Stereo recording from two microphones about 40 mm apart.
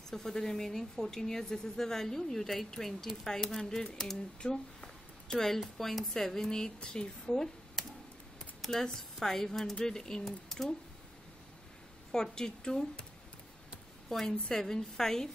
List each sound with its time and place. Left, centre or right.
0.1 s speech: centre
4.4 s a sound: centre
5.8 s speech: centre
7.2 s a sound: centre
8.9 s speech: centre
12.1 s speech: centre
14.0 s speech: centre